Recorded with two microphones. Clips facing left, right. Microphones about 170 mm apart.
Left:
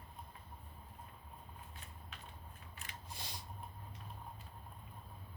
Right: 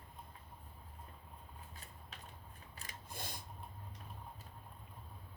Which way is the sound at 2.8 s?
50° right (ahead or behind).